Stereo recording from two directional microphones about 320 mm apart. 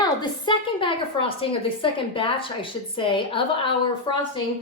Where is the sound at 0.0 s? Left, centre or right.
Centre.